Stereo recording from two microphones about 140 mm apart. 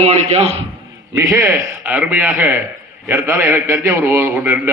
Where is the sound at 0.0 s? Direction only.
50° right (ahead or behind).